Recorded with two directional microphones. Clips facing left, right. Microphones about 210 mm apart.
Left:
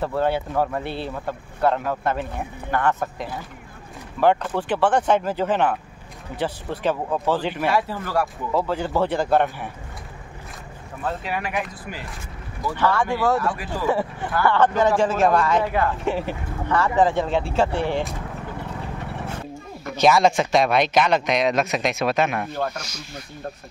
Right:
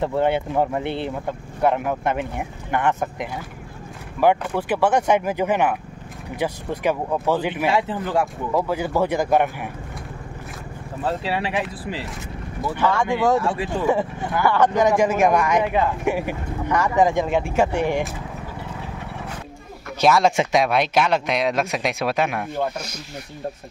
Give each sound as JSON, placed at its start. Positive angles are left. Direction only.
{"t": 0.0, "sound": "speech", "side_deg": -20}
{"t": 7.7, "sound": "speech", "side_deg": -20}
{"t": 8.5, "sound": "speech", "side_deg": -10}
{"t": 11.1, "sound": "speech", "side_deg": -30}
{"t": 12.7, "sound": "speech", "side_deg": -15}
{"t": 20.0, "sound": "speech", "side_deg": -5}